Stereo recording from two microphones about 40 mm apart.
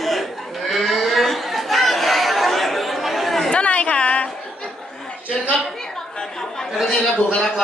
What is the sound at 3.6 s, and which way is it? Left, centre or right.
Chatter, left.